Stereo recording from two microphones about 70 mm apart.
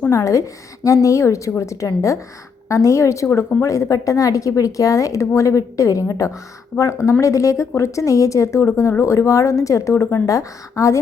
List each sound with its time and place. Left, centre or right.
0.1 s speech: left